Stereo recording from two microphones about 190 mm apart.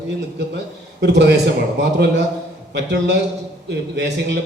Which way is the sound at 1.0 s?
65° right (ahead or behind).